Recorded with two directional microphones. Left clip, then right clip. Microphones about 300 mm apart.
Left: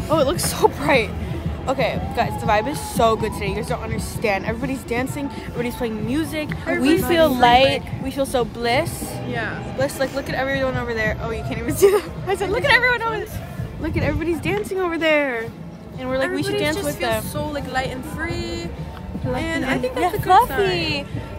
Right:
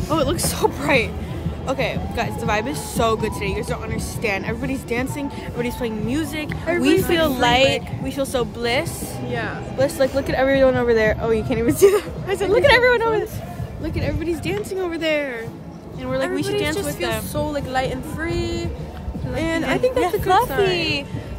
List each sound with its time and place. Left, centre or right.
0.1 s speech: centre; by 11.7 s right
11.7 s speech: centre
12.4 s speech: right
13.8 s a woman's voice: centre
16.1 s speech: centre
17.4 s speech: right